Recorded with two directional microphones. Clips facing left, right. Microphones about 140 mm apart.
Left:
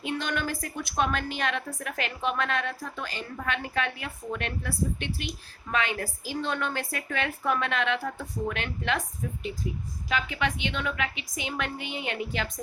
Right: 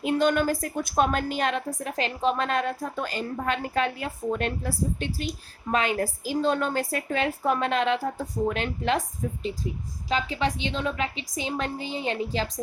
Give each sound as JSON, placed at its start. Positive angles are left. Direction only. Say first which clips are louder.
{"t": 0.0, "sound": "a woman's voice", "louder": "right 8 dB", "side_deg": -40}